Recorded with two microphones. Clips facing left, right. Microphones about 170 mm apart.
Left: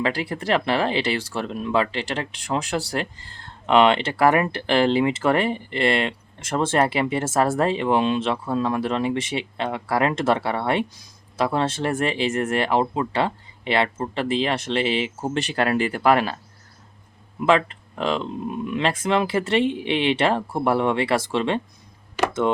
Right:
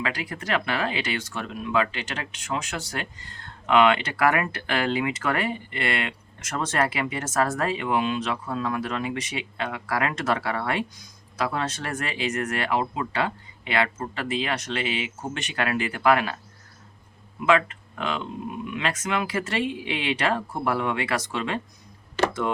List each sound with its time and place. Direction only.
0.0 s speech: 30° left (ahead or behind)
17.4 s speech: 30° left (ahead or behind)